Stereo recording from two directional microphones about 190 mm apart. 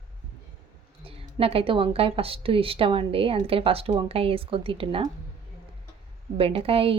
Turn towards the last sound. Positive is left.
turn(degrees=-30)  # may be behind; listen again after turning